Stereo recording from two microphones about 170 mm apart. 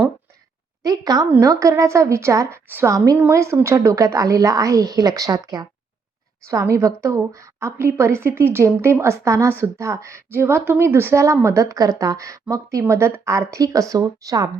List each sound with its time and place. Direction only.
0.8 s a woman's voice: 20° right (ahead or behind)